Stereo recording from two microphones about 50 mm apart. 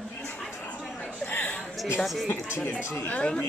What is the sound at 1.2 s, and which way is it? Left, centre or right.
Speech, left.